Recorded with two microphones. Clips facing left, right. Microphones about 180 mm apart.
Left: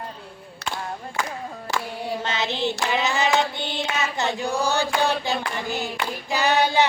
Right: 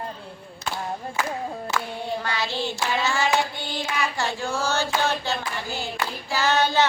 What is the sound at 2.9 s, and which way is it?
Child singing, 20° left (ahead or behind).